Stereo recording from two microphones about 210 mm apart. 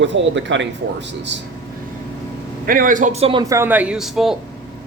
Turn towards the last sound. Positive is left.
turn(degrees=0)  # may be behind; listen again after turning